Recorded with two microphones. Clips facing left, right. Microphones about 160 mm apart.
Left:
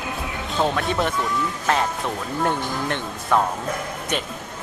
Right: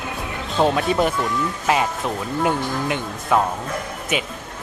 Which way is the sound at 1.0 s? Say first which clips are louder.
Right 3 dB; centre (ahead or behind).